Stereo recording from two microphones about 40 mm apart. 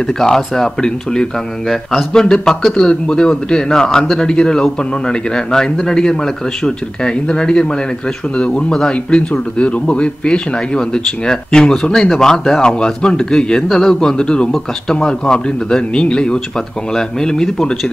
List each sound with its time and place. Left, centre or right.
0.0 s a man's voice: centre
1.7 s speech: centre
2.1 s a man's voice: centre